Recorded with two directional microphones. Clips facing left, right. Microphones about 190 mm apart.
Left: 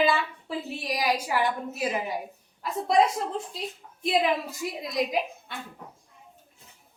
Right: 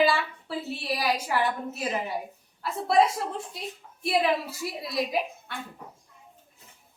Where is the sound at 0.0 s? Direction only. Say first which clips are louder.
Right 1 dB; 20° left (ahead or behind).